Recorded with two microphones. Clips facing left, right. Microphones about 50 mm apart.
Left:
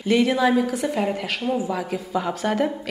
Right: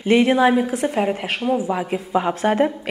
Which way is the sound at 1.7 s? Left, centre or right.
Right.